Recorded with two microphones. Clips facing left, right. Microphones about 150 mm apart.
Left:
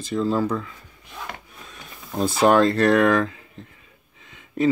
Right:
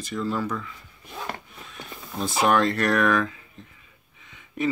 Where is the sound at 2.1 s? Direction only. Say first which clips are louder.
Left 5 dB; 30° left (ahead or behind).